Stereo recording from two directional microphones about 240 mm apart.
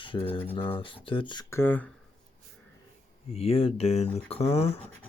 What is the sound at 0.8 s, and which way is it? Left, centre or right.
Speech, left.